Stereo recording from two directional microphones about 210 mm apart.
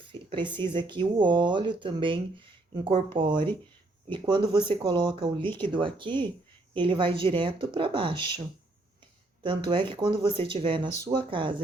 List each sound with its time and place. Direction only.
0.0 s speech: 25° right (ahead or behind)
9.4 s speech: 25° right (ahead or behind)